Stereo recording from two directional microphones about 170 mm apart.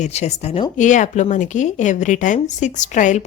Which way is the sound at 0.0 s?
40° left (ahead or behind).